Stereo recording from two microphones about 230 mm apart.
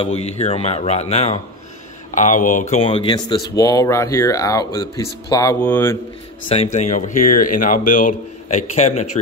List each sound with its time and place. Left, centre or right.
0.0 s speech: left; by 5.9 s centre
6.5 s speech: left